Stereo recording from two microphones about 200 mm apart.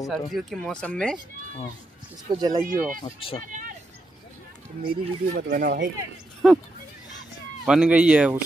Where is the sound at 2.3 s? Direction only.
20° right (ahead or behind).